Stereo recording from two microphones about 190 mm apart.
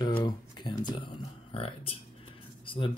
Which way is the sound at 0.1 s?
15° left (ahead or behind).